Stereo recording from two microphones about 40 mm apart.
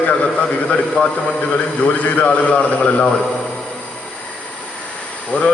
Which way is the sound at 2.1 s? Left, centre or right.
Left.